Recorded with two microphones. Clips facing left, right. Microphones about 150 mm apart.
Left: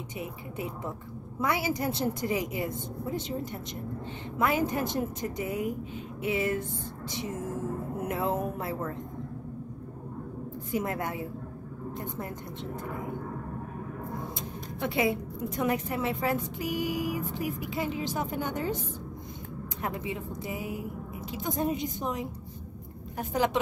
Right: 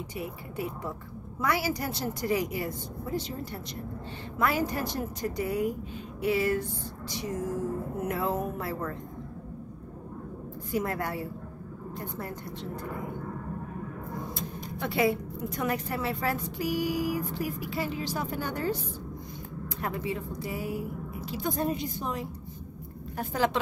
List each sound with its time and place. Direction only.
0.2 s a woman's voice: 20° left (ahead or behind)
4.4 s a woman's voice: 20° left (ahead or behind)
8.1 s a woman's voice: 20° left (ahead or behind)
10.7 s a woman's voice: 20° left (ahead or behind)
14.8 s a woman's voice: 20° left (ahead or behind)
19.8 s a woman's voice: 20° left (ahead or behind)